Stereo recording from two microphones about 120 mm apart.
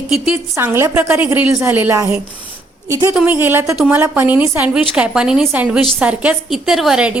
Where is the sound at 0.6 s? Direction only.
20° right (ahead or behind).